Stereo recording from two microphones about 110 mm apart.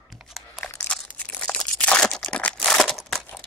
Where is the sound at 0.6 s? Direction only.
15° left (ahead or behind).